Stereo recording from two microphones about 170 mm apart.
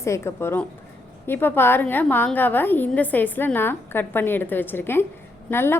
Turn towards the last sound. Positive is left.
turn(degrees=15)  # may be behind; listen again after turning